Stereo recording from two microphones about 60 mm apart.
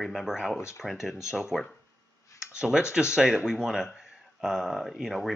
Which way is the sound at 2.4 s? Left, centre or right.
Centre.